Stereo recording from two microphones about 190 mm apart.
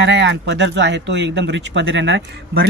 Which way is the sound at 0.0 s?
65° right (ahead or behind).